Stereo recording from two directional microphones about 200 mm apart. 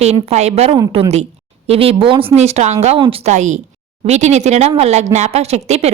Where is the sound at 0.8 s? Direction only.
20° right (ahead or behind).